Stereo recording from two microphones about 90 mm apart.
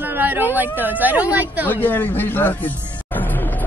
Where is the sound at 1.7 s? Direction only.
20° left (ahead or behind).